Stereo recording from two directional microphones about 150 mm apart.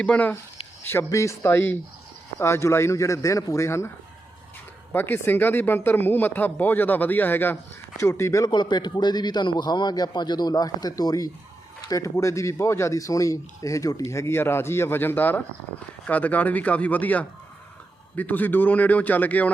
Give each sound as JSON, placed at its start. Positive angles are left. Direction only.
{"t": 0.0, "sound": "speech", "side_deg": 10}